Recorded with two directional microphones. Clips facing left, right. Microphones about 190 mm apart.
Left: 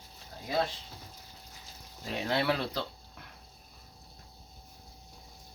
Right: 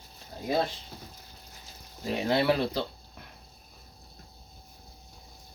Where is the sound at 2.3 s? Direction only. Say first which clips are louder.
Right 5 dB; 10° right (ahead or behind).